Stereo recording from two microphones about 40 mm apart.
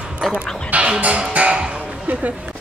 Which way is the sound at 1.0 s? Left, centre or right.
Right.